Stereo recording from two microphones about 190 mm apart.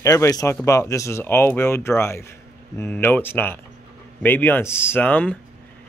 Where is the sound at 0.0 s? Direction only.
15° left (ahead or behind).